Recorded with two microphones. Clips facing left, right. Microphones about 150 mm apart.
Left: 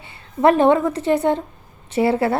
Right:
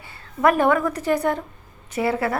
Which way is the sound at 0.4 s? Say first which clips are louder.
Left 4 dB; 25° left (ahead or behind).